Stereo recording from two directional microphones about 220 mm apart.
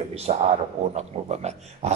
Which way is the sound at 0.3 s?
30° right (ahead or behind).